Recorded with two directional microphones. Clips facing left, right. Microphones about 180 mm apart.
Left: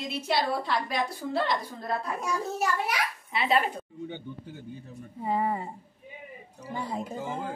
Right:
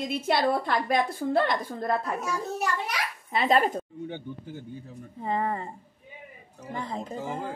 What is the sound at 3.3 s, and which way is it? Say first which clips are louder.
Speech: right 4 dB; 45° right (ahead or behind).